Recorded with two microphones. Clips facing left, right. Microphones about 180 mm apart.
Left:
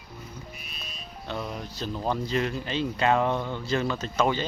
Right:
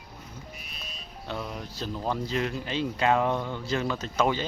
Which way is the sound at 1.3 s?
10° right (ahead or behind).